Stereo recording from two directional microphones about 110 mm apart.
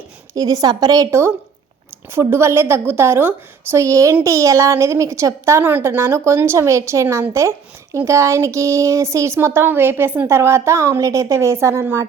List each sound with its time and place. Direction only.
0.3 s a woman's voice: 35° right (ahead or behind)